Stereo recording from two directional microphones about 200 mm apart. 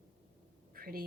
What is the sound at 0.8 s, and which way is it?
Quack, 50° right (ahead or behind).